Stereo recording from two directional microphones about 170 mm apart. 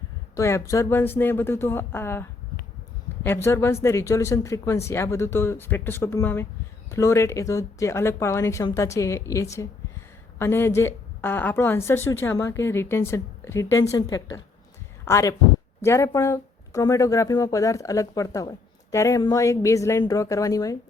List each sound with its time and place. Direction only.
0.3 s a woman's voice: 15° left (ahead or behind)
3.2 s a woman's voice: 15° left (ahead or behind)